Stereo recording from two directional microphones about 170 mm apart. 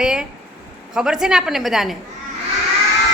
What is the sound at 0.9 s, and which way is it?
Female singing, 5° right (ahead or behind).